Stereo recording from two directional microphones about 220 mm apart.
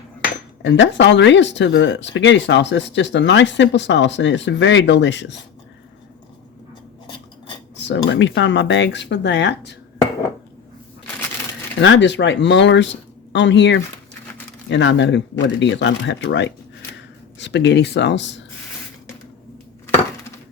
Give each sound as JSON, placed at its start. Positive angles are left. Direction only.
{"t": 0.6, "sound": "speech", "side_deg": 55}
{"t": 7.8, "sound": "speech", "side_deg": 55}
{"t": 11.8, "sound": "speech", "side_deg": 55}